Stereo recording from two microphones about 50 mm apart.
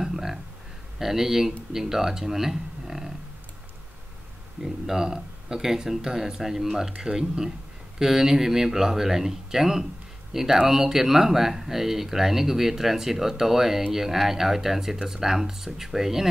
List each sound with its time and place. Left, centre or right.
0.0 s a sound: centre
0.9 s speech: centre
4.6 s speech: centre